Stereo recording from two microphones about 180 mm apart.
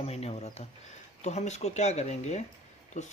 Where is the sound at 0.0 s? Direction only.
35° left (ahead or behind).